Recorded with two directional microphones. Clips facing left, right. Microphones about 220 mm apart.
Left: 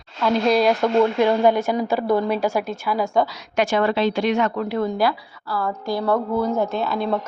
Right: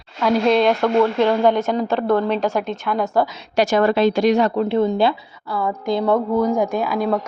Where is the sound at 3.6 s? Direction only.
45° right (ahead or behind).